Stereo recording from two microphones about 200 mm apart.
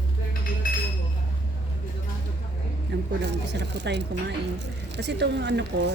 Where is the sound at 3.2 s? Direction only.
60° right (ahead or behind).